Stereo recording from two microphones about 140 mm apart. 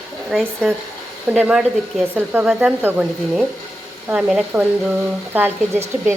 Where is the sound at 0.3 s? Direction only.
Centre (ahead or behind).